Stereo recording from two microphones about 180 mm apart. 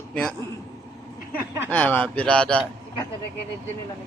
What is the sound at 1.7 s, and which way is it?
Speech, 10° left (ahead or behind).